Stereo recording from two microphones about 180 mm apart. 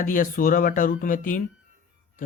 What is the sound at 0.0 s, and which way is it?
Speech, 50° left (ahead or behind).